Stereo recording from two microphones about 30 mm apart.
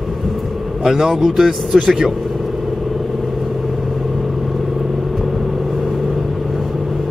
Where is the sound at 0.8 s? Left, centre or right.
Centre.